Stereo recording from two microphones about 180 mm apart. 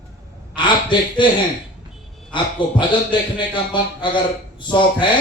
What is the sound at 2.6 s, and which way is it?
Speech, 25° left (ahead or behind).